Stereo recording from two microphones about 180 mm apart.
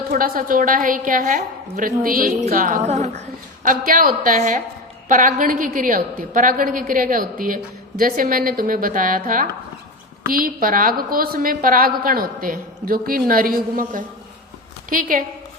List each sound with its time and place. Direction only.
0.1 s a woman's voice: 50° right (ahead or behind)